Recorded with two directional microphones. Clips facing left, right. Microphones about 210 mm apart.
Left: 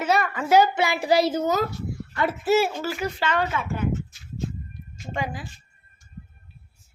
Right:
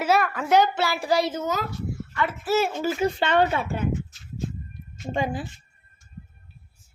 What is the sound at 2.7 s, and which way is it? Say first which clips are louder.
Speech: right 4 dB; 25° right (ahead or behind).